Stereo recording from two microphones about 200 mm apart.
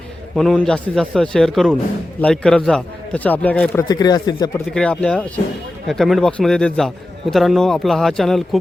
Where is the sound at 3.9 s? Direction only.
20° left (ahead or behind).